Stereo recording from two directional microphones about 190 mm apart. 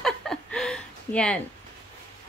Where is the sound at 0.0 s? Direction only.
5° left (ahead or behind).